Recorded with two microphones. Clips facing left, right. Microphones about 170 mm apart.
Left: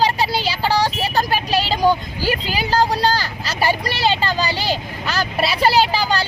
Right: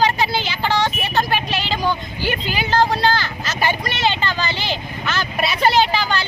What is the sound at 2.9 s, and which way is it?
Vehicle, 35° left (ahead or behind).